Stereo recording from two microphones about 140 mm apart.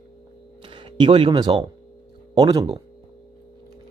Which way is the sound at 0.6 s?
35° right (ahead or behind).